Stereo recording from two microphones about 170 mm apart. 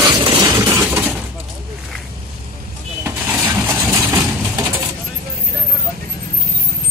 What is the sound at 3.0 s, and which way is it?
Vehicle, 10° right (ahead or behind).